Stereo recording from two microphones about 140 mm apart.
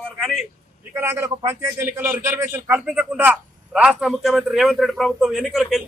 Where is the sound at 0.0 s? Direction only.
Centre (ahead or behind).